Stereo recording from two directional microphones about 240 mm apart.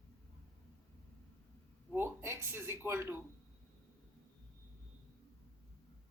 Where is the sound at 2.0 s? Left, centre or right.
Centre.